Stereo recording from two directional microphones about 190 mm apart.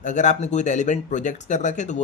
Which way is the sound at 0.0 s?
40° left (ahead or behind).